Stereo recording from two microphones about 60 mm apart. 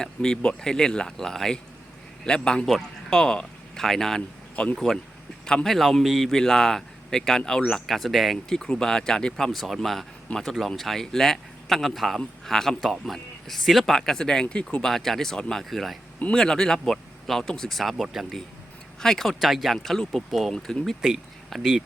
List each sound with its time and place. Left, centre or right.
0.0 s a man's voice: centre
4.5 s speech: centre
5.6 s a man's voice: centre
9.5 s speech: centre
10.3 s speech: left
10.7 s a man's voice: centre
14.8 s a man's voice: centre
18.9 s a man's voice: centre
20.8 s speech: centre